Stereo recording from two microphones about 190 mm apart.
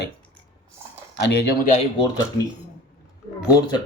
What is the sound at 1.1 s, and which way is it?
Speech, 65° left (ahead or behind).